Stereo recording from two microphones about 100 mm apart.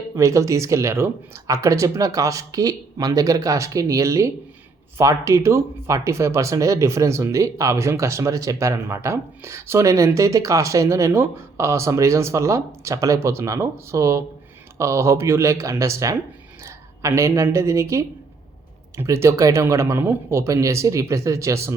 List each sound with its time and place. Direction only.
0.2 s speech: 30° right (ahead or behind)